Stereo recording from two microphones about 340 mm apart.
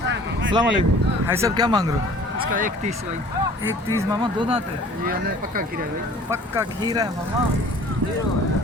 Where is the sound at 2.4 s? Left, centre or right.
Right.